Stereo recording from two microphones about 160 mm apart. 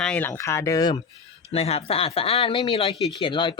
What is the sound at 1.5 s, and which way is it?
Speech, 40° left (ahead or behind).